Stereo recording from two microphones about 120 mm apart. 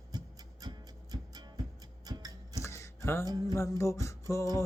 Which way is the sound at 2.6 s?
25° left (ahead or behind).